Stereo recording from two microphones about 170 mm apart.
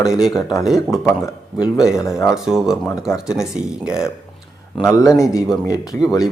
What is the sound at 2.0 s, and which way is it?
Speech, 20° left (ahead or behind).